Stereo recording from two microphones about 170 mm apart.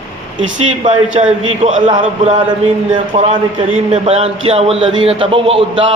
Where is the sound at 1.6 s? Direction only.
45° right (ahead or behind).